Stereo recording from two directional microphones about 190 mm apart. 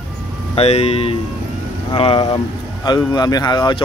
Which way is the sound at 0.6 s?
35° left (ahead or behind).